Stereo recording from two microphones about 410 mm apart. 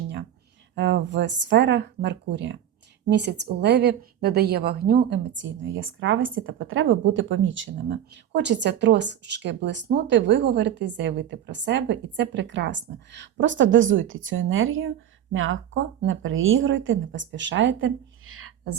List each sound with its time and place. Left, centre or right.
0.8 s a woman's voice: right